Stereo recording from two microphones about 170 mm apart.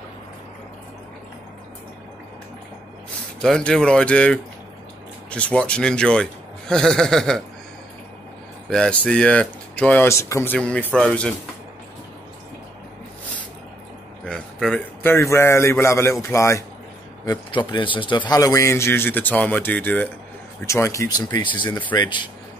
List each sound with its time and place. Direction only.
3.3 s speech: 5° left (ahead or behind)
8.6 s speech: 5° left (ahead or behind)
14.2 s a sound: 5° left (ahead or behind)
15.1 s speech: 15° left (ahead or behind)
17.6 s speech: 30° left (ahead or behind); by 21.9 s 10° left (ahead or behind)
21.9 s speech: 25° left (ahead or behind)